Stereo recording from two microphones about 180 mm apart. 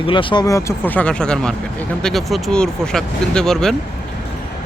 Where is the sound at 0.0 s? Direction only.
30° left (ahead or behind); by 3.8 s 5° left (ahead or behind).